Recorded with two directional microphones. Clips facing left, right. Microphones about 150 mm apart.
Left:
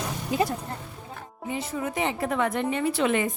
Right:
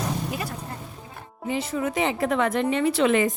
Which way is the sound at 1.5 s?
90° right.